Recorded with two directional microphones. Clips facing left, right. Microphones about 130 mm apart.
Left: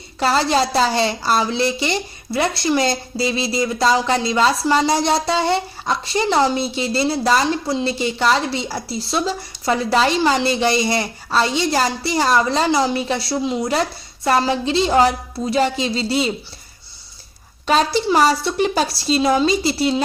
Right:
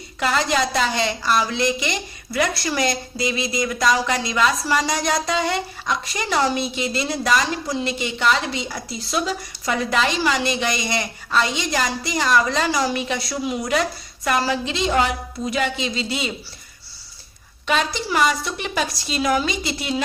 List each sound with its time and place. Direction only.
0.2 s a woman's voice: 30° left (ahead or behind)
17.7 s a woman's voice: 35° left (ahead or behind)